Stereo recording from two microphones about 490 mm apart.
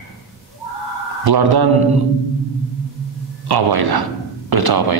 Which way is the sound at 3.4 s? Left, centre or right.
Right.